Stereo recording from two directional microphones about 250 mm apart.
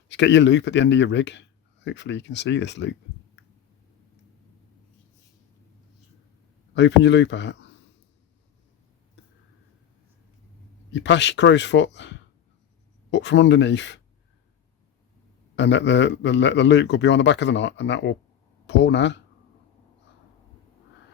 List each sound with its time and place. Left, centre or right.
0.1 s speech: left
6.7 s speech: left
10.9 s speech: left
15.5 s speech: left